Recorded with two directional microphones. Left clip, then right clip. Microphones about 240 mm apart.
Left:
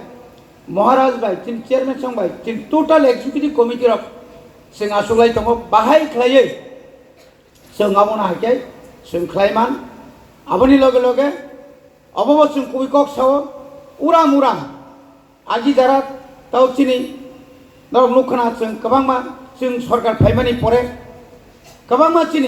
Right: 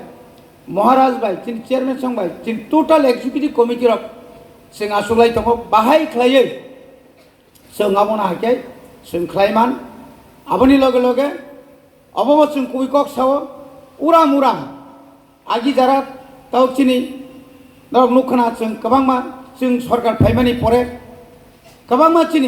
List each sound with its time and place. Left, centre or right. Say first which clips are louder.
0.7 s a man's voice: even; right
7.8 s a man's voice: left 1 dB; right
21.8 s a man's voice: right 1 dB; right